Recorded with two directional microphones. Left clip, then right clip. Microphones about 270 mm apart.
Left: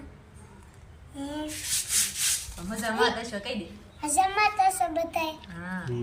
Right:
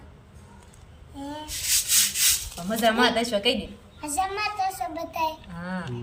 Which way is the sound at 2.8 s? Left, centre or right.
Right.